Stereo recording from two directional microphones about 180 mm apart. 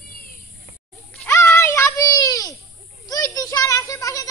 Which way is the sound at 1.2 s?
10° left (ahead or behind).